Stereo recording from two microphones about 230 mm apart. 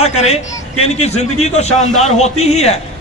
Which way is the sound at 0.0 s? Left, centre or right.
Left.